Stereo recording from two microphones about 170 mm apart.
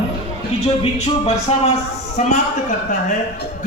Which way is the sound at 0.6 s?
40° left (ahead or behind).